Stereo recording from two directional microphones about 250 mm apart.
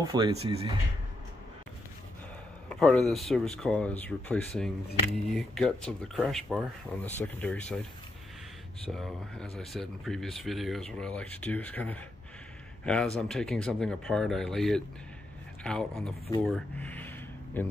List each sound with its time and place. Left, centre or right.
0.0 s speech: centre
2.7 s speech: centre
8.8 s speech: centre